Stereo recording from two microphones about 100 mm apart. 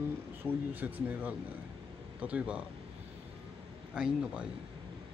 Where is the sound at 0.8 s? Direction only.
15° right (ahead or behind).